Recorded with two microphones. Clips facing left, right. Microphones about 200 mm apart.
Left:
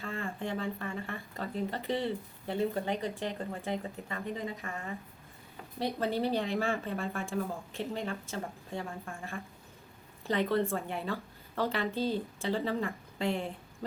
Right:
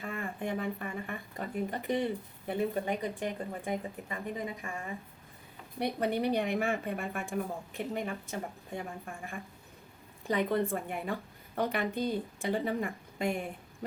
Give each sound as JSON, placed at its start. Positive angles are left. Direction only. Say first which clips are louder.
{"t": 0.0, "sound": "speech", "louder": "even", "side_deg": -15}